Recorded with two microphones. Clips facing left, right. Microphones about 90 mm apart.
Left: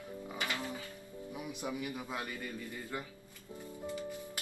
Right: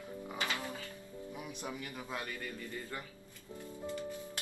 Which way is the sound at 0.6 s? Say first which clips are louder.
Left 1 dB; 20° left (ahead or behind).